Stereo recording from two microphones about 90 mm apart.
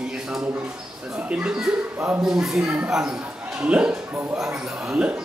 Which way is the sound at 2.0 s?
25° right (ahead or behind).